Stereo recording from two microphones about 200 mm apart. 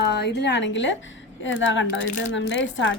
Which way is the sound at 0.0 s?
55° left (ahead or behind).